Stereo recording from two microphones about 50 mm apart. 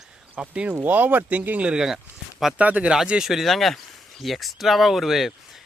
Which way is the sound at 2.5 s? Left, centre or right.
Right.